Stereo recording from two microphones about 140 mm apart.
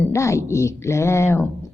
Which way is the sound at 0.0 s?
20° left (ahead or behind).